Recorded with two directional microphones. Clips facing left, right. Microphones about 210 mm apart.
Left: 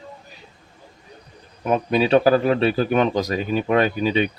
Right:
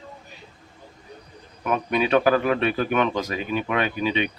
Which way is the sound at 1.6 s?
30° left (ahead or behind).